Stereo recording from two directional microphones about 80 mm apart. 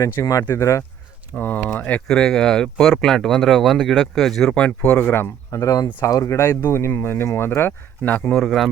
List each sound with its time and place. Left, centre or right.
0.0 s speech: left
1.4 s speech: left; by 4.5 s centre
4.5 s speech: centre
5.5 s speech: left
6.6 s speech: left
8.3 s speech: centre